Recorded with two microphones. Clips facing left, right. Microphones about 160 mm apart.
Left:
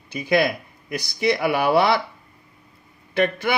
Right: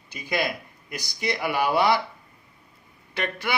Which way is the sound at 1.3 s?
65° left (ahead or behind).